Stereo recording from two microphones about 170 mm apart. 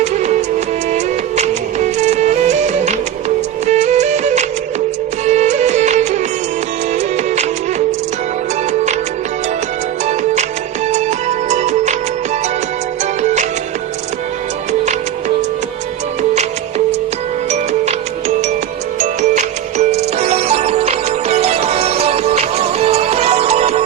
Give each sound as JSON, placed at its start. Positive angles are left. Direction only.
{"t": 0.0, "sound": "music", "side_deg": -45}
{"t": 10.9, "sound": "music", "side_deg": -45}
{"t": 13.2, "sound": "music", "side_deg": -45}
{"t": 16.3, "sound": "music", "side_deg": -40}
{"t": 18.9, "sound": "music", "side_deg": -45}